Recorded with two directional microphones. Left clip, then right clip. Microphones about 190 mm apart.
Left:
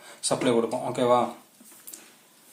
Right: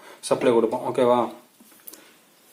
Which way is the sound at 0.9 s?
35° right (ahead or behind).